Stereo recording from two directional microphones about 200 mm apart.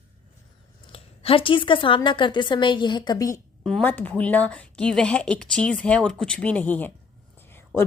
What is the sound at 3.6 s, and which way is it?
A woman's voice, 5° left (ahead or behind).